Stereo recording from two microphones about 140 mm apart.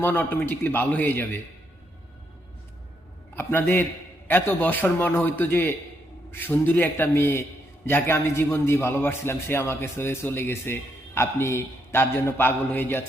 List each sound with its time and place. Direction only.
0.0 s a man's voice: 15° left (ahead or behind)
3.3 s a man's voice: 15° left (ahead or behind)